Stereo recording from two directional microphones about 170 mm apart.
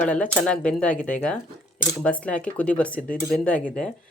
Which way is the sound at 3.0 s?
50° left (ahead or behind).